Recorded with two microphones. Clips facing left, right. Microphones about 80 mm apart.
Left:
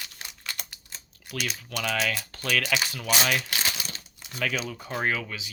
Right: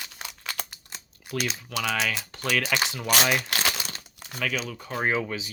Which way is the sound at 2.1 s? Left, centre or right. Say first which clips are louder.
Right 1 dB; right.